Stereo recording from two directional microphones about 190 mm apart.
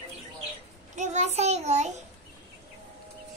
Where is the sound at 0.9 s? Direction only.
40° right (ahead or behind).